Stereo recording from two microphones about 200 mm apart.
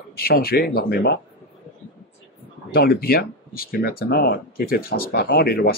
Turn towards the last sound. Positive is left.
turn(degrees=50)  # may be behind; listen again after turning